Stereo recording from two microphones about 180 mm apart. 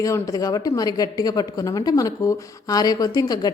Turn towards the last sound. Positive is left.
turn(degrees=20)  # may be behind; listen again after turning